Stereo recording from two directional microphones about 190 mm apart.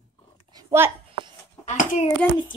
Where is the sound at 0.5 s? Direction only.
10° right (ahead or behind).